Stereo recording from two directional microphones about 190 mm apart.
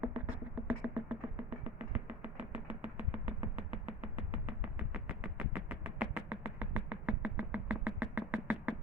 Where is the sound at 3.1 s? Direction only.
10° right (ahead or behind).